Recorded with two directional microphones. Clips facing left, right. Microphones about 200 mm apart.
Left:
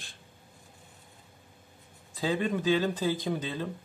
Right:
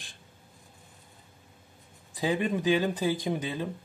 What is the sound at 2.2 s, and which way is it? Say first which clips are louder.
Speech: right 1 dB; 15° right (ahead or behind).